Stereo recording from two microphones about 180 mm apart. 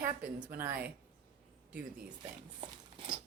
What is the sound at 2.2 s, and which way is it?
Speech, 25° right (ahead or behind).